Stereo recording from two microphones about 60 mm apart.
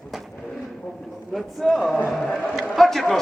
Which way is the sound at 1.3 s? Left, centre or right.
Centre.